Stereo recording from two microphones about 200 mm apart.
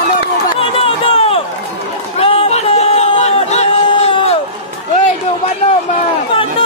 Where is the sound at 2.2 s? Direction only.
30° left (ahead or behind).